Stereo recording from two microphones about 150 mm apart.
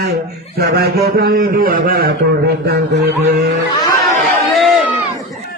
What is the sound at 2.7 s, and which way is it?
Speech, 90° right.